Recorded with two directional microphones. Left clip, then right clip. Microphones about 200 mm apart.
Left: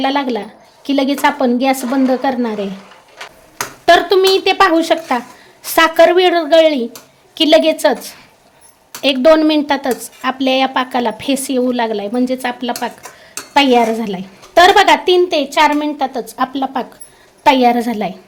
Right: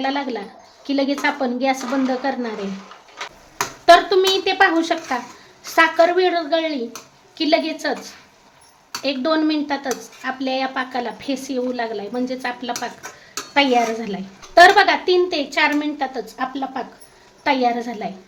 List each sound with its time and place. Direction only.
0.0 s a woman's voice: 45° left (ahead or behind)
3.8 s a woman's voice: 45° left (ahead or behind)
17.4 s a woman's voice: 50° left (ahead or behind)